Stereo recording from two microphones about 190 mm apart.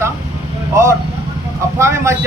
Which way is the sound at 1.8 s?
15° right (ahead or behind).